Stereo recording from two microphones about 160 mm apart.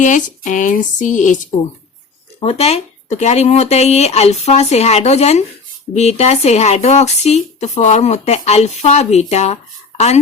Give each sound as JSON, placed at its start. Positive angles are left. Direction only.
{"t": 0.0, "sound": "speech", "side_deg": 50}
{"t": 2.4, "sound": "speech", "side_deg": 40}